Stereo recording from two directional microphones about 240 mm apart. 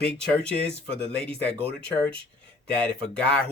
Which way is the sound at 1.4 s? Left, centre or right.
Centre.